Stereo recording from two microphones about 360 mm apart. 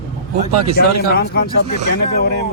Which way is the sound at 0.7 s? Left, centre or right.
Left.